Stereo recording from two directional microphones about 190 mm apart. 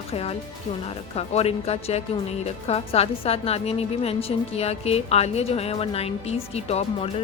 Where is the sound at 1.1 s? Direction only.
35° left (ahead or behind).